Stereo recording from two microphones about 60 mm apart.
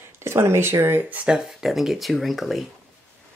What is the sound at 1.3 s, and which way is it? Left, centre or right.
Speech, centre.